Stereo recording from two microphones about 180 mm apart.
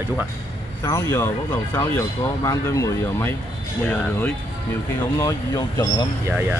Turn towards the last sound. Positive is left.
turn(degrees=-5)  # may be behind; listen again after turning